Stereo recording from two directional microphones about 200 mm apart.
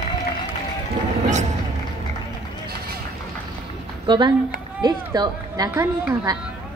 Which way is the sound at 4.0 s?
25° right (ahead or behind).